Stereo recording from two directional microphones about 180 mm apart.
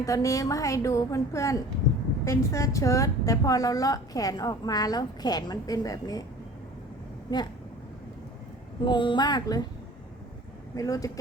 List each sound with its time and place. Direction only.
0.0 s a woman's voice: 20° left (ahead or behind)
8.8 s a woman's voice: 25° left (ahead or behind)
10.8 s a woman's voice: 20° left (ahead or behind)